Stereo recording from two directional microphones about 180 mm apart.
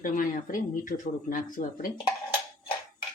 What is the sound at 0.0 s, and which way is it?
Speech, 45° left (ahead or behind).